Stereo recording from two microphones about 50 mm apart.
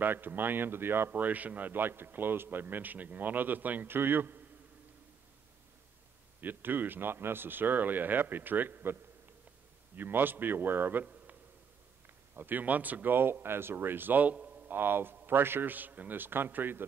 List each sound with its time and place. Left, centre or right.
0.0 s a man's voice: right
1.1 s a man's voice: right
6.4 s a man's voice: right
9.9 s a man's voice: right
12.4 s a man's voice: right
14.7 s a man's voice: right